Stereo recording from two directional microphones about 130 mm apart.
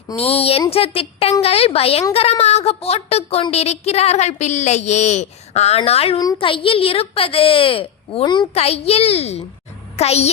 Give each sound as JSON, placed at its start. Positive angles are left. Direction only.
{"t": 0.2, "sound": "a woman's voice", "side_deg": 50}
{"t": 8.2, "sound": "a woman's voice", "side_deg": 35}
{"t": 8.5, "sound": "a woman's voice", "side_deg": 50}